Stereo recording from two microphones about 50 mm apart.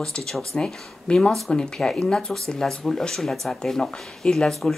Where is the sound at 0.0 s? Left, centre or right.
Centre.